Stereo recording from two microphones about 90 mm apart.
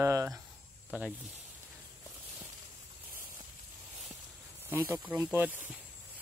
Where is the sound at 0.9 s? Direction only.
15° right (ahead or behind).